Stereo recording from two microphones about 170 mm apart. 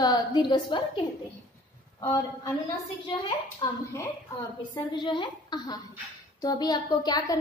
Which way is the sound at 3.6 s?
30° left (ahead or behind).